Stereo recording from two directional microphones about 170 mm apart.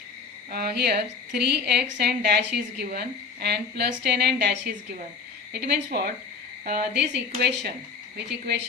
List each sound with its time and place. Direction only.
0.5 s a woman's voice: 70° right (ahead or behind)